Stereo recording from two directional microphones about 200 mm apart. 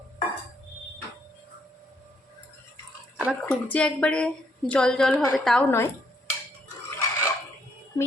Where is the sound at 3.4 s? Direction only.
5° left (ahead or behind).